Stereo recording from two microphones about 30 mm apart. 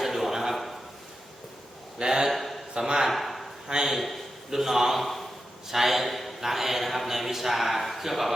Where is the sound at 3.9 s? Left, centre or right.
Centre.